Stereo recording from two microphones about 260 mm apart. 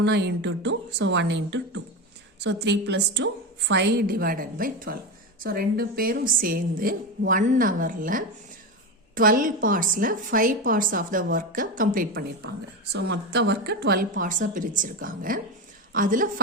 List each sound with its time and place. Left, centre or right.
0.0 s a woman's voice: right